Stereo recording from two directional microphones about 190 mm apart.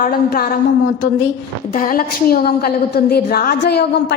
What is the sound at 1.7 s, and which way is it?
A woman's voice, 45° left (ahead or behind).